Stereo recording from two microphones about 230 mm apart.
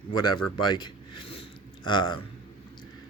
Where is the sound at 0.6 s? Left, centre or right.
Centre.